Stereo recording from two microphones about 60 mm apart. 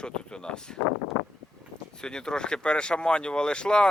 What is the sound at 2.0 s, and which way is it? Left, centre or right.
Speech, centre.